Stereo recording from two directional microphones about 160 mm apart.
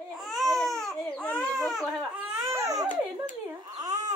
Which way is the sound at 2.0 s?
20° right (ahead or behind).